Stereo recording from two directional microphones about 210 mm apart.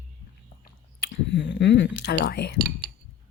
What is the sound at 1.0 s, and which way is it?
Speech, 60° left (ahead or behind).